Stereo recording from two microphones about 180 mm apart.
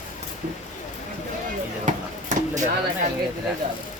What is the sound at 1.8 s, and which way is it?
Chop, 45° right (ahead or behind).